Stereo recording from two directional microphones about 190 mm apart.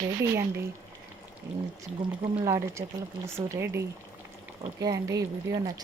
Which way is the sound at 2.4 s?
15° right (ahead or behind).